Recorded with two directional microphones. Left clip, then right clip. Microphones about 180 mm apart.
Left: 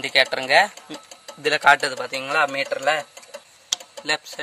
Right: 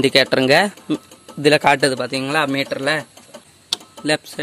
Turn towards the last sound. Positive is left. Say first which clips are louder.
# right 4 dB
turn(degrees=-25)  # may be behind; listen again after turning